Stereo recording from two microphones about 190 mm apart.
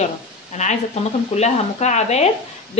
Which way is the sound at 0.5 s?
40° left (ahead or behind).